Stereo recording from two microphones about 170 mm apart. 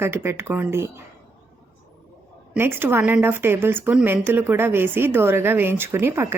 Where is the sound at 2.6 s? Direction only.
15° right (ahead or behind).